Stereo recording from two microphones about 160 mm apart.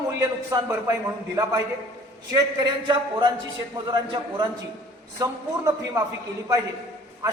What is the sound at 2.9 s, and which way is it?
A man's voice, 25° right (ahead or behind).